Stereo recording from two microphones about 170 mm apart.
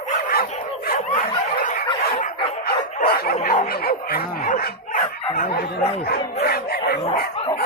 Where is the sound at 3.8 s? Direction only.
65° left (ahead or behind).